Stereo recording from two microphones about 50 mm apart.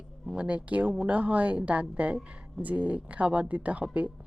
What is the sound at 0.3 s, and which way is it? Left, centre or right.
Speech, right.